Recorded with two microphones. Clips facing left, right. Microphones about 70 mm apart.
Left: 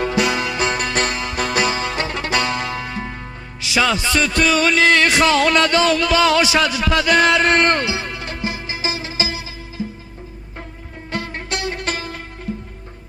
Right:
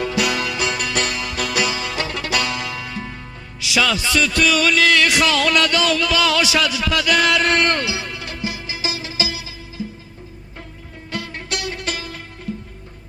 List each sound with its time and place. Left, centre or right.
0.0 s music: left
11.1 s music: left